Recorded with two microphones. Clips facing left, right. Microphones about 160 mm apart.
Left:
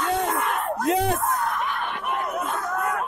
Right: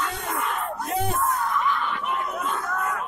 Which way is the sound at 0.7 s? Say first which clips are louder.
Left 5 dB; 85° left.